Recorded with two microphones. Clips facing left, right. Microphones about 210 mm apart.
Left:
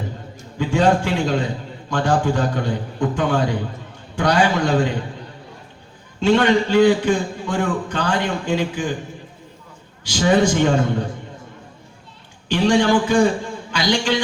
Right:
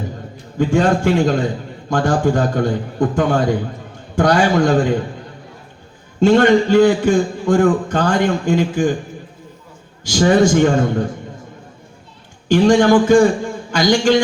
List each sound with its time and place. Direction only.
0.6 s a man's voice: 50° right (ahead or behind)
6.1 s a man's voice: 45° right (ahead or behind)
10.0 s a man's voice: 45° right (ahead or behind)
12.5 s a man's voice: 45° right (ahead or behind)